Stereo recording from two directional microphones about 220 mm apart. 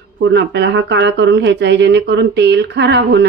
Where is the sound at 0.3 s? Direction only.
50° right (ahead or behind).